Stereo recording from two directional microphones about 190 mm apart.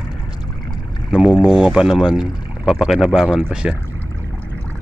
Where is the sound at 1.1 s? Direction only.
5° right (ahead or behind).